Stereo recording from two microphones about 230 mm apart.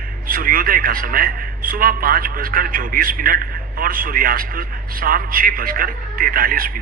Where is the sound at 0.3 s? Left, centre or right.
Right.